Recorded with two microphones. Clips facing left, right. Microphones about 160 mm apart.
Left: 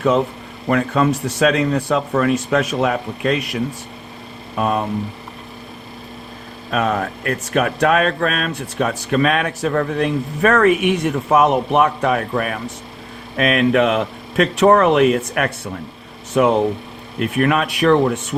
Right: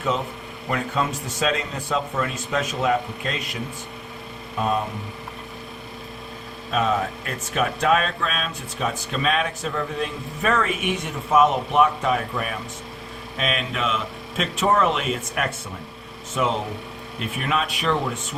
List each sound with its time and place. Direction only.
0.7 s a man's voice: 70° left (ahead or behind)
6.7 s speech: 60° left (ahead or behind)